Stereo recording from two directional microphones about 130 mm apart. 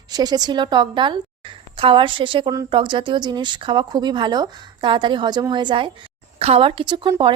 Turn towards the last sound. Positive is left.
turn(degrees=-40)  # may be behind; listen again after turning